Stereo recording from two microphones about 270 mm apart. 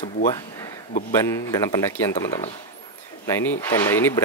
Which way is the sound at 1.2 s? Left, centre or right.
Centre.